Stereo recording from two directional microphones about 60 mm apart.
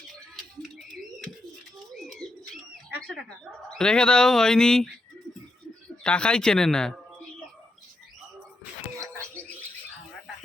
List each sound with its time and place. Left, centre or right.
2.0 s bird: centre
3.2 s speech: centre
6.0 s speech: centre
9.2 s bird: left